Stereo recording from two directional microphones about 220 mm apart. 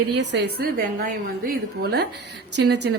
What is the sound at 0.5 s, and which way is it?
A woman's voice, 40° right (ahead or behind).